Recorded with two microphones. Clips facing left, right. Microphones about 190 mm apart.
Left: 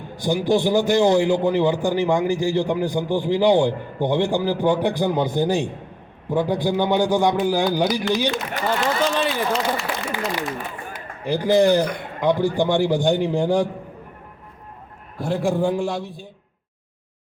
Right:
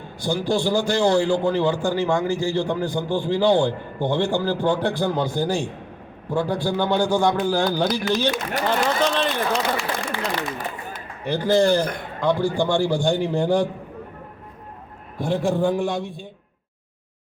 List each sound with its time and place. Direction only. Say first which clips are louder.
0.2 s a man's voice: left 3 dB; 15° left (ahead or behind)
15.2 s speech: even; 5° left (ahead or behind)